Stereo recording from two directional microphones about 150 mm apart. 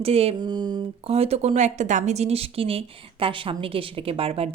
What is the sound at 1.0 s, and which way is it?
Speech, 40° right (ahead or behind).